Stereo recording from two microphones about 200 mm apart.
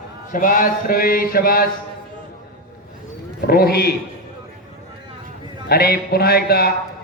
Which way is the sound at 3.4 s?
50° left (ahead or behind).